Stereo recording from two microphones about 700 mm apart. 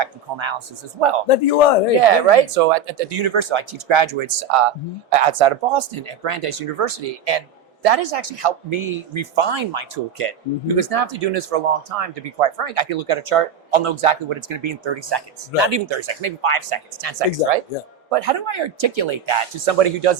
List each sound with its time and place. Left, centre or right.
0.0 s speech: right
1.3 s a man's voice: left
2.0 s speech: right